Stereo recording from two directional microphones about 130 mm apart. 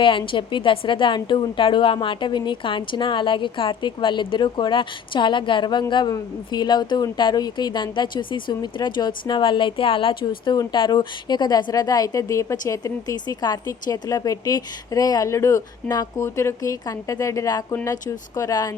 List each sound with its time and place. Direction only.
0.0 s a woman's voice: 40° left (ahead or behind)